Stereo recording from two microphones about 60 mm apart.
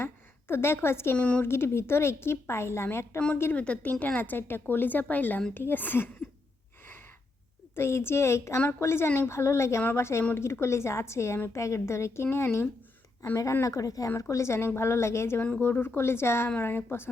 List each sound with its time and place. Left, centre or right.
0.0 s a sound: left
1.1 s speech: left
1.4 s a woman's voice: left
3.5 s speech: left
7.8 s a woman's voice: left
9.0 s speech: left
9.3 s a woman's voice: left
13.3 s speech: left
14.2 s a woman's voice: left
15.4 s speech: centre
15.6 s a woman's voice: left